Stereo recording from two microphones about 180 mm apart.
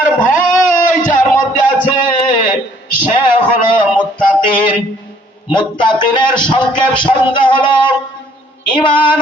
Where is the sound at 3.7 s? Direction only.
25° left (ahead or behind).